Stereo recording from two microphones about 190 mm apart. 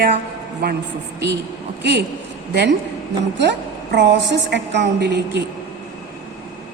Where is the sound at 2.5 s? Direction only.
60° right (ahead or behind).